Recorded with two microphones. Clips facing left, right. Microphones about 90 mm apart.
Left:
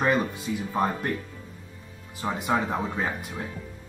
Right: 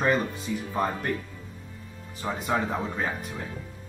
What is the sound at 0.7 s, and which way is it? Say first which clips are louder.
Speech: left 2 dB; 20° left (ahead or behind).